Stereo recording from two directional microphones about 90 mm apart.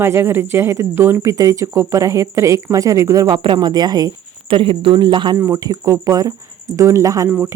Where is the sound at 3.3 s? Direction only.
65° right (ahead or behind); by 4.1 s 45° right (ahead or behind).